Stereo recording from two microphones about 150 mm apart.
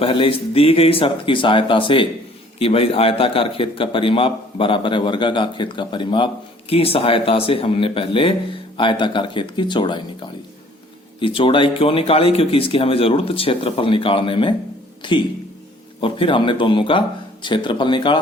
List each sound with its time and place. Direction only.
0.0 s a man's voice: 35° left (ahead or behind)